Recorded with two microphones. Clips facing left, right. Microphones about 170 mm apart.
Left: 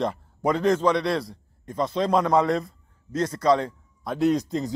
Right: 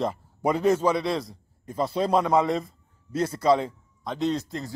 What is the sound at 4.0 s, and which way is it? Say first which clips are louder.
Speech: left 4 dB; 5° left (ahead or behind).